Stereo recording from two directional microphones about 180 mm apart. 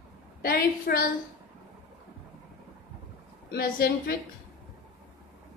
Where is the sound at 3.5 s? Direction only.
55° left (ahead or behind).